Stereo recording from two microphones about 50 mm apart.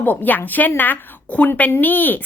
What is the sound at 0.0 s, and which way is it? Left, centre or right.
Speech, left.